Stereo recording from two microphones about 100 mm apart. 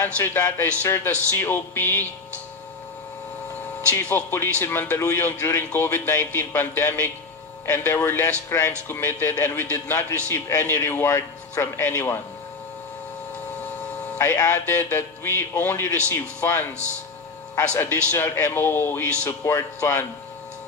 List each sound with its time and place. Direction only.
0.0 s speech: 20° left (ahead or behind)
4.1 s speech: 20° left (ahead or behind)
13.6 s a sound: 15° left (ahead or behind)
14.5 s speech: 25° left (ahead or behind)